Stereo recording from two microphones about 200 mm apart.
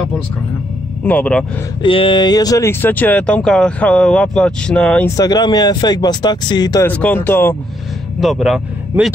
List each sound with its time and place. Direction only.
1.0 s speech: 5° left (ahead or behind)
1.8 s speech: 25° left (ahead or behind); by 5.1 s 5° left (ahead or behind)
5.1 s speech: 20° left (ahead or behind)
6.9 s speech: 5° left (ahead or behind)
8.2 s speech: centre (ahead or behind)